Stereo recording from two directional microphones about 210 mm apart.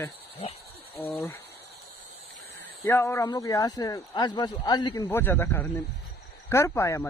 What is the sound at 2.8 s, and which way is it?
Speech, 10° left (ahead or behind).